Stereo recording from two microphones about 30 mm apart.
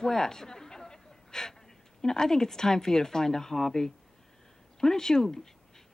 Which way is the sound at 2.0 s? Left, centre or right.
Centre.